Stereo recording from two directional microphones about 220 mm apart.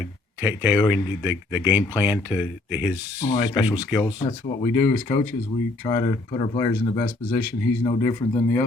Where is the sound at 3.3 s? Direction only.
20° left (ahead or behind).